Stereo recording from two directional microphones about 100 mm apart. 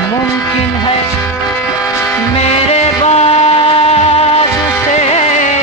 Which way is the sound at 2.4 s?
90° left.